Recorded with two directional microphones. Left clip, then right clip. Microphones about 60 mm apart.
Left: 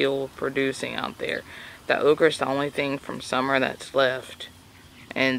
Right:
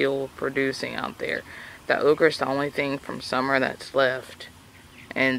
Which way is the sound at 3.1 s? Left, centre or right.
Centre.